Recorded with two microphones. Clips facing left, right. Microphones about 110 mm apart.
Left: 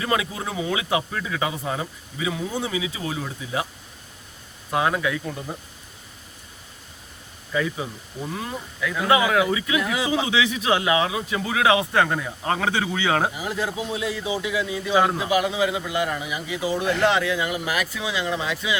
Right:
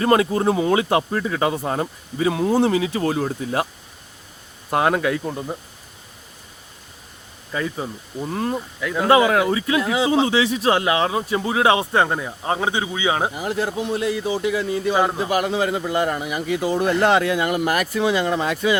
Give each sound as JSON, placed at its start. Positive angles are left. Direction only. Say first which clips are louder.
{"t": 0.0, "sound": "speech", "louder": "right 8 dB", "side_deg": -45}
{"t": 2.3, "sound": "speech", "louder": "right 10 dB", "side_deg": -60}
{"t": 4.7, "sound": "speech", "louder": "right 4 dB", "side_deg": -50}
{"t": 7.5, "sound": "speech", "louder": "even", "side_deg": -40}
{"t": 8.8, "sound": "a man's voice", "louder": "right 2 dB", "side_deg": -25}
{"t": 9.0, "sound": "a man's voice", "louder": "right 4 dB", "side_deg": -40}
{"t": 13.3, "sound": "speech", "louder": "right 4 dB", "side_deg": -50}